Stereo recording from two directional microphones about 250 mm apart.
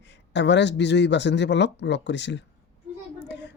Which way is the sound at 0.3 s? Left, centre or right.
Left.